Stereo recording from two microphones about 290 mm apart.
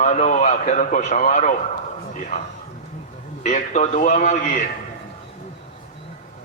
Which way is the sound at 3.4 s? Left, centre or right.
Left.